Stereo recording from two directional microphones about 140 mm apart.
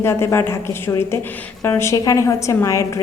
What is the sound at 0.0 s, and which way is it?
A woman's voice, 20° left (ahead or behind).